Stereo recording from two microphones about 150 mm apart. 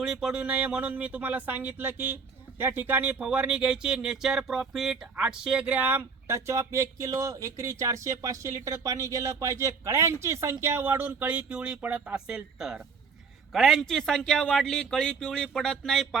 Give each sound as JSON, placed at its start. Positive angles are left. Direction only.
{"t": 0.0, "sound": "a man's voice", "side_deg": -5}